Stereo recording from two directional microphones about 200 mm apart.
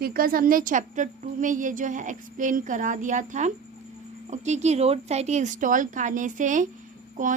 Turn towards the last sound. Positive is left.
turn(degrees=-35)  # may be behind; listen again after turning